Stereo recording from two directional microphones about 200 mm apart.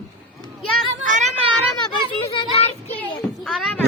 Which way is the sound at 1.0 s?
40° right (ahead or behind).